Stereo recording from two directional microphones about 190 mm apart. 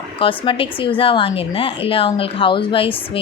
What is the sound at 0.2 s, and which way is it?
A woman's voice, 30° left (ahead or behind).